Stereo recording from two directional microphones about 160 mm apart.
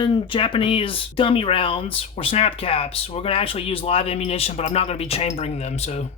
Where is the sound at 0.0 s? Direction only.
35° left (ahead or behind).